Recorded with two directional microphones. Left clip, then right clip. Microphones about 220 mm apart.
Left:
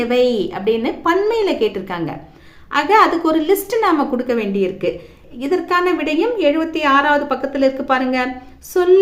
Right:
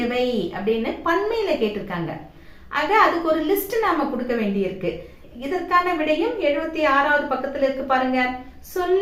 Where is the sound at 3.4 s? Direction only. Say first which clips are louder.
Left 5 dB; 50° left (ahead or behind).